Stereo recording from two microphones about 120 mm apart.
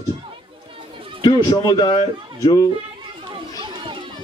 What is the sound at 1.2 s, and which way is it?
Speech, 35° left (ahead or behind).